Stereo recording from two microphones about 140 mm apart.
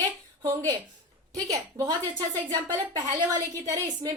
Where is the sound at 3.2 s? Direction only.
25° right (ahead or behind).